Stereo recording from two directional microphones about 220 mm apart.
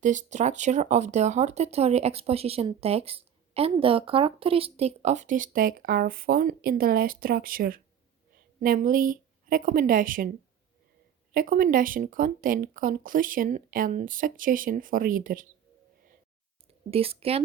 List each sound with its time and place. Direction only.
0.0 s speech: 35° right (ahead or behind)
11.3 s speech: 40° right (ahead or behind)
16.9 s a woman's voice: 25° right (ahead or behind)